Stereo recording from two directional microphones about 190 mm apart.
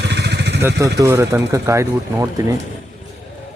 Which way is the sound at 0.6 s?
15° right (ahead or behind).